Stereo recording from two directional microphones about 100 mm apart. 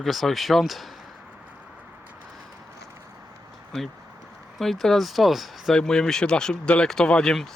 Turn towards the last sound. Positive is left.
turn(degrees=5)  # may be behind; listen again after turning